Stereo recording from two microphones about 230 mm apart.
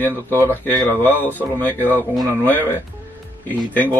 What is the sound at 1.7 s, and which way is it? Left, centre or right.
Speech, centre.